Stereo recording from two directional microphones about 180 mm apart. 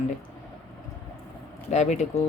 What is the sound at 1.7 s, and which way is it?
Speech, 40° left (ahead or behind).